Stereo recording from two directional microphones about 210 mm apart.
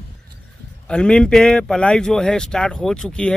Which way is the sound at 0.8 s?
5° left (ahead or behind).